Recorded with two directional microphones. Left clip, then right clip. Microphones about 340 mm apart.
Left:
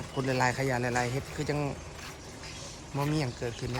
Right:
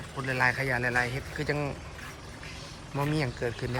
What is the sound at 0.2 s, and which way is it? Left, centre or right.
A man's voice, centre.